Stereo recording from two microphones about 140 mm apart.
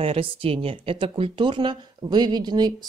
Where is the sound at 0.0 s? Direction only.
45° right (ahead or behind).